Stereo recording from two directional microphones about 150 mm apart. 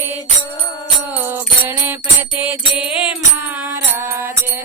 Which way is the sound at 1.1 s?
15° right (ahead or behind).